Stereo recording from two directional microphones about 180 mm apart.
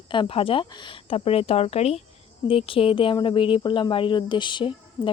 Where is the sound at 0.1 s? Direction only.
30° left (ahead or behind).